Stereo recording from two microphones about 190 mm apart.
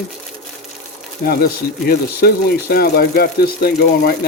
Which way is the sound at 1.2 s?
55° left (ahead or behind).